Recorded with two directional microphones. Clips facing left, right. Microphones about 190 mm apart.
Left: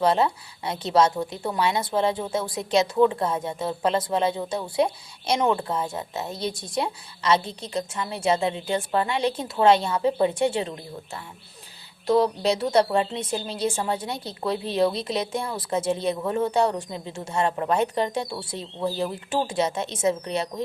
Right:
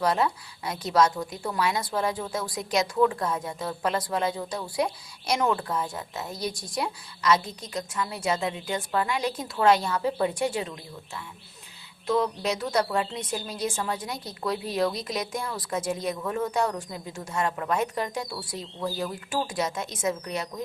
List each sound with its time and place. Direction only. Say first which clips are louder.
0.0 s a woman's voice: left 4 dB; 25° left (ahead or behind)